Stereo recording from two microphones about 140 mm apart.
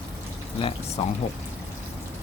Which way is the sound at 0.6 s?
40° left (ahead or behind).